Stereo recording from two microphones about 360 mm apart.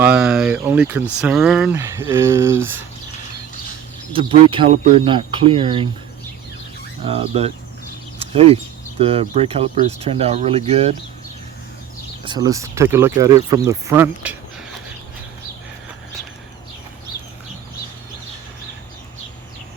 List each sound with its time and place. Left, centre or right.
0.0 s a sound: centre
1.0 s speech: centre
4.1 s speech: centre
7.0 s speech: centre
12.2 s speech: centre